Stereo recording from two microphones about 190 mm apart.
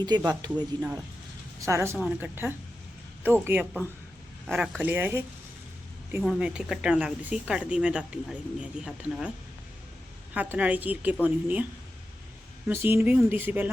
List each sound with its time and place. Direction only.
0.0 s a woman's voice: 20° right (ahead or behind)
4.4 s a woman's voice: centre (ahead or behind)
6.2 s speech: 5° right (ahead or behind)
10.3 s a woman's voice: 10° right (ahead or behind)
12.6 s a woman's voice: 10° right (ahead or behind)